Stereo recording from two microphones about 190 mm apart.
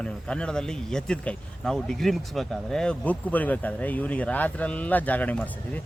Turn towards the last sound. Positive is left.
turn(degrees=10)  # may be behind; listen again after turning